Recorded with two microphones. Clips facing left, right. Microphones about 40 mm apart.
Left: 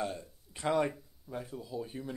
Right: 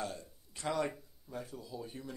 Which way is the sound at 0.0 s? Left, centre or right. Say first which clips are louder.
Left 4 dB; left.